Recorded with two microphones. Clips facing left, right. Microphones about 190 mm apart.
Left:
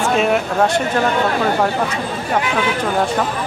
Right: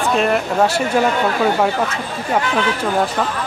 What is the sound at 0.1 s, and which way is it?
Speech, centre (ahead or behind).